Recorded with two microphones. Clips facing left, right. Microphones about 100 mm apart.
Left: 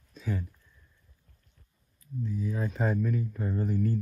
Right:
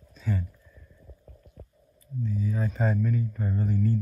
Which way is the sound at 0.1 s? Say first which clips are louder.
Right 2 dB; centre (ahead or behind).